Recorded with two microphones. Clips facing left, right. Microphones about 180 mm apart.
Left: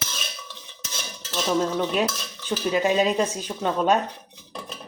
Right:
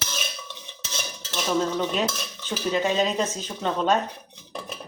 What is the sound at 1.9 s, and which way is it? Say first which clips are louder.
Stir: left 2 dB; 10° left (ahead or behind).